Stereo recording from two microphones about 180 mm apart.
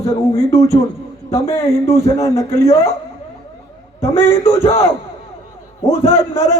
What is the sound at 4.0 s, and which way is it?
Speech, 15° left (ahead or behind).